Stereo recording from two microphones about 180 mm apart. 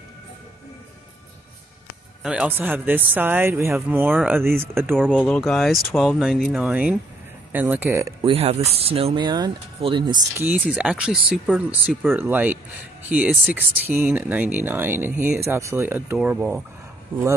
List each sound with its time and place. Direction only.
2.2 s speech: 5° right (ahead or behind)
4.9 s speech: 5° left (ahead or behind); by 8.3 s 15° right (ahead or behind)
8.3 s speech: 35° right (ahead or behind)
10.4 s speech: 10° right (ahead or behind)